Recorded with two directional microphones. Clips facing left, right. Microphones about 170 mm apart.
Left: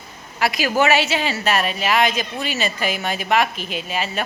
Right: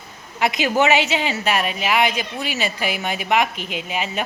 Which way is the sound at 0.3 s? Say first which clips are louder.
Even; 20° right (ahead or behind).